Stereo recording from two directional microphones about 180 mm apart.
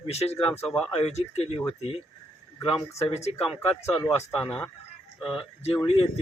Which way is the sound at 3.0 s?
35° left (ahead or behind).